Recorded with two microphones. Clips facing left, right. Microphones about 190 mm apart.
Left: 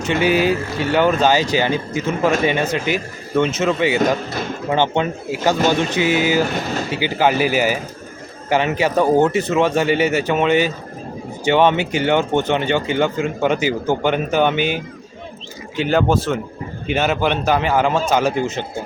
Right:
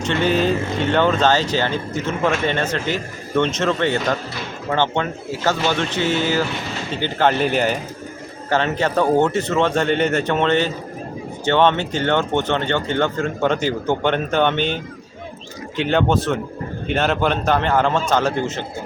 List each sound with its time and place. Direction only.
0.0 s speech: 10° left (ahead or behind)
6.4 s speech: 45° left (ahead or behind)
6.9 s a man's voice: 10° left (ahead or behind)